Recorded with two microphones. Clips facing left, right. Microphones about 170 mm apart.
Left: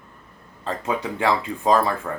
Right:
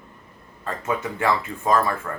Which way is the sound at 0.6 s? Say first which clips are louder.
Left 1 dB; 15° left (ahead or behind).